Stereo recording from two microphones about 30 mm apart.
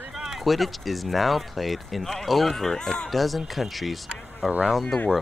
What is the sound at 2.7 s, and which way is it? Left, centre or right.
Speech, left.